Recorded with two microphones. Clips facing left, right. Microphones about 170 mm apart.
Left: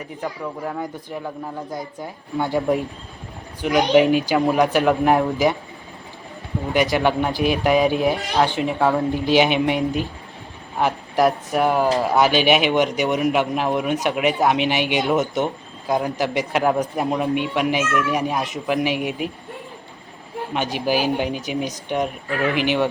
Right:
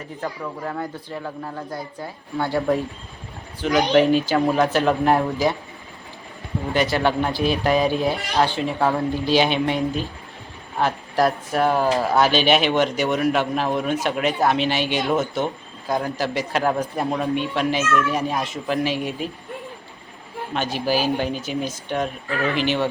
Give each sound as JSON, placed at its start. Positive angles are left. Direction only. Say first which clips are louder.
{"t": 0.2, "sound": "speech", "louder": "left 1 dB", "side_deg": 10}
{"t": 6.7, "sound": "speech", "louder": "left 2 dB", "side_deg": 15}
{"t": 20.5, "sound": "speech", "louder": "left 1 dB", "side_deg": 15}